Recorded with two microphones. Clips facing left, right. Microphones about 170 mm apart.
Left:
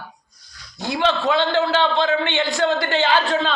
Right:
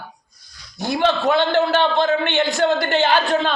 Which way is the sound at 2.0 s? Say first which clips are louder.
Right 1 dB; 50° right (ahead or behind).